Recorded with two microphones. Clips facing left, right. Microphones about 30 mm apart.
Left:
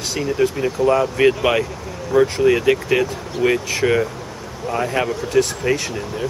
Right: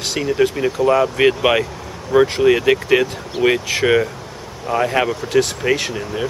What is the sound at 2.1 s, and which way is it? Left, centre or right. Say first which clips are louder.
Speech: right 2 dB; right.